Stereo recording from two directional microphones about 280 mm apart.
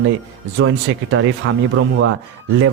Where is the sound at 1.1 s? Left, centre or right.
Right.